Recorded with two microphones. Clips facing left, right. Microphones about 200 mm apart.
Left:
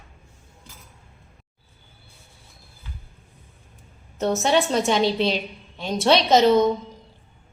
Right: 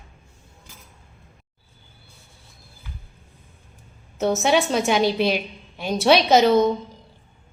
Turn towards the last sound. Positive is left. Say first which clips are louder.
# even
turn(degrees=-5)  # may be behind; listen again after turning